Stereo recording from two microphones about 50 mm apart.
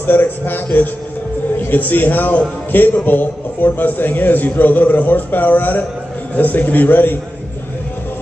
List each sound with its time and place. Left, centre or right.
0.0 s a man's voice: left
1.6 s a man's voice: left